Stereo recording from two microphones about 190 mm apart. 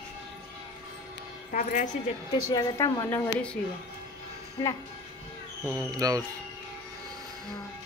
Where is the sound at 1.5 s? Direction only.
45° left (ahead or behind).